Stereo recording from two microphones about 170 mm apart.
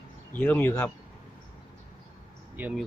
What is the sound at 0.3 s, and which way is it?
Speech, 10° left (ahead or behind).